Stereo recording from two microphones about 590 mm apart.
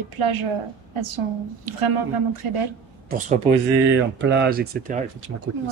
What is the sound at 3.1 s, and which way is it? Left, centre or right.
Speech, centre.